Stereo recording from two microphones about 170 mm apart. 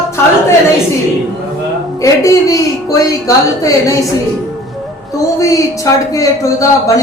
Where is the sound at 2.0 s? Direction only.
20° left (ahead or behind).